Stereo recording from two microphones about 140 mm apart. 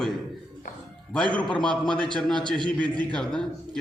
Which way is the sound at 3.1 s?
5° left (ahead or behind).